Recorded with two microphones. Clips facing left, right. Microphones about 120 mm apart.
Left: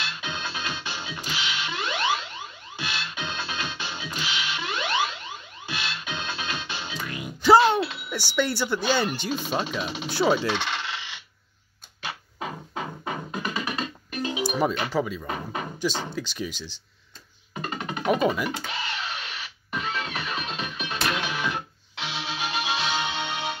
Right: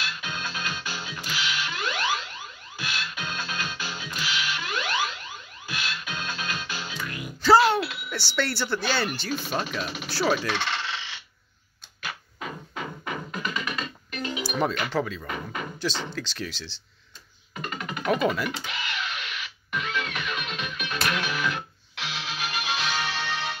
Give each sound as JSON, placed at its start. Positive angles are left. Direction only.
{"t": 0.0, "sound": "music", "side_deg": 25}
{"t": 8.4, "sound": "speech", "side_deg": 15}
{"t": 10.6, "sound": "coin", "side_deg": 10}
{"t": 12.0, "sound": "music", "side_deg": 25}
{"t": 14.9, "sound": "speech", "side_deg": 10}
{"t": 17.6, "sound": "music", "side_deg": 30}
{"t": 18.3, "sound": "speech", "side_deg": 10}
{"t": 18.6, "sound": "music", "side_deg": 30}